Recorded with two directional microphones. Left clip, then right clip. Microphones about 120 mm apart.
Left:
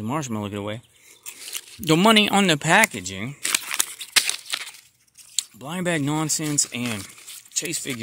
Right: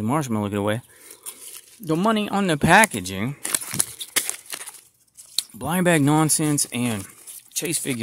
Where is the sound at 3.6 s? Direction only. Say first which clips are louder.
Left 4 dB; 45° right (ahead or behind).